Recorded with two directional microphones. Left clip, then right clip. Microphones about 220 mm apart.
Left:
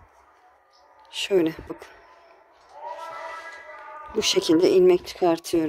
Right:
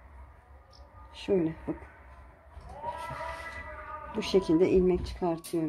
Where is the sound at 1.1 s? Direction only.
40° left (ahead or behind).